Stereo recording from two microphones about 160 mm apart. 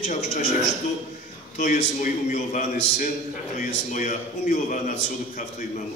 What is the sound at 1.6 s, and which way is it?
A man's voice, 50° left (ahead or behind).